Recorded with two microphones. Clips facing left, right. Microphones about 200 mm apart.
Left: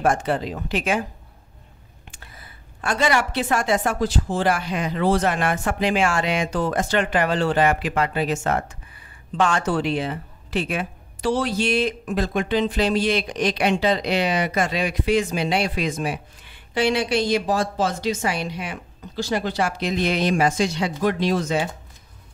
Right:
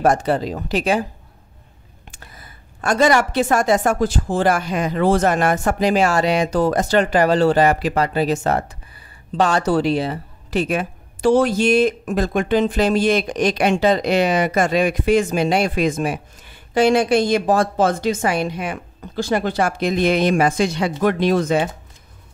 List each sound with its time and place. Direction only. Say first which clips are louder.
0.0 s a woman's voice: right 4 dB; 40° right (ahead or behind)
2.0 s a woman's voice: right 3 dB; 45° right (ahead or behind)